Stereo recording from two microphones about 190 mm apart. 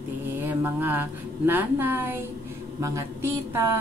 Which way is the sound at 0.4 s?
10° right (ahead or behind).